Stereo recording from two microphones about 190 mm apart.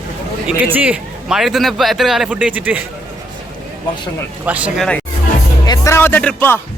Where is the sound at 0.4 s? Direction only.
10° right (ahead or behind).